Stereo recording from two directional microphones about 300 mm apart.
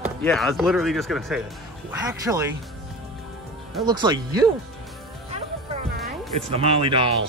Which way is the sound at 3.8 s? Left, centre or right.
Centre.